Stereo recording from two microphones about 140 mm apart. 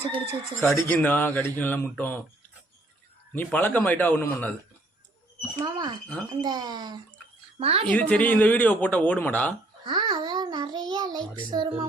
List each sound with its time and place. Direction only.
0.6 s speech: 15° left (ahead or behind)
3.3 s speech: 15° left (ahead or behind)
5.5 s music: 30° right (ahead or behind)
6.4 s speech: 30° right (ahead or behind)
7.6 s a woman's voice: 45° right (ahead or behind)
7.9 s speech: 10° left (ahead or behind)
9.8 s babbling: 35° right (ahead or behind)
11.3 s music: 30° right (ahead or behind)